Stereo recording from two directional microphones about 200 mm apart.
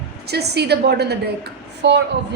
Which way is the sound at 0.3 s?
55° right (ahead or behind).